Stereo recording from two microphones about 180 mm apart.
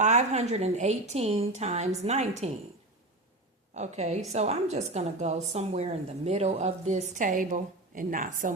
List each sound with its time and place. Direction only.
0.0 s a woman's voice: 40° right (ahead or behind)
3.8 s a woman's voice: 40° right (ahead or behind)